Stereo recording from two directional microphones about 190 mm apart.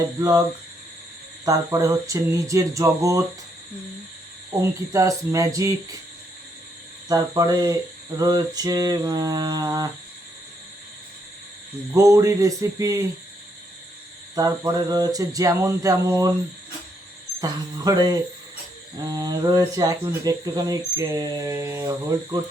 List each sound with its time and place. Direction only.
0.2 s speech: 20° right (ahead or behind)
1.5 s speech: 15° right (ahead or behind)
4.6 s speech: 15° right (ahead or behind)
7.1 s speech: 20° right (ahead or behind)
11.9 s speech: 15° right (ahead or behind)
14.3 s speech: 20° right (ahead or behind)
17.4 s speech: 20° right (ahead or behind)